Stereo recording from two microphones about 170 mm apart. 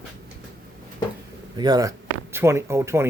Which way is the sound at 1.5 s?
25° right (ahead or behind).